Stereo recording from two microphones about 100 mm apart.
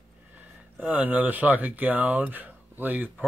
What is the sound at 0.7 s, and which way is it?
A man's voice, 15° right (ahead or behind).